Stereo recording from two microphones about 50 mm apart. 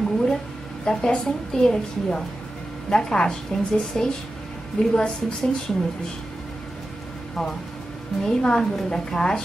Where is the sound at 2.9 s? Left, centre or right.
Centre.